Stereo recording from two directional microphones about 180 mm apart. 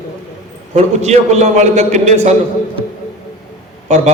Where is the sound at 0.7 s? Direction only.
40° right (ahead or behind).